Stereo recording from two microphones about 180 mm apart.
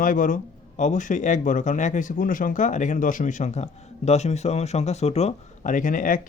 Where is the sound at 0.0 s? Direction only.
50° left (ahead or behind).